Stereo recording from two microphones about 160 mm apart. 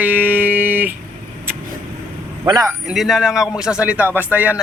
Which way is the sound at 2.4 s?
25° right (ahead or behind).